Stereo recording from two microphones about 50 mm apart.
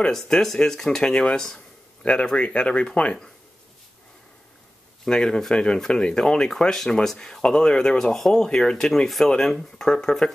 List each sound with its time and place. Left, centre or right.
0.1 s speech: centre
5.0 s speech: centre